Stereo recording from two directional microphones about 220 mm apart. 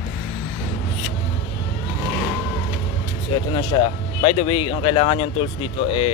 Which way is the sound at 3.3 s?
20° left (ahead or behind).